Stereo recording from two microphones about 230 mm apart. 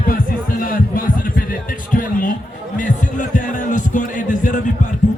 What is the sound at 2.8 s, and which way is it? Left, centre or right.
Music, left.